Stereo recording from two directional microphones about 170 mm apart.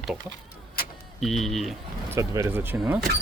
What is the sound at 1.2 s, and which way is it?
Speech, centre (ahead or behind).